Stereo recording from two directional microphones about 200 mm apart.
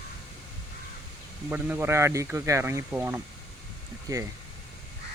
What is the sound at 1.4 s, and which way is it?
Speech, 10° right (ahead or behind).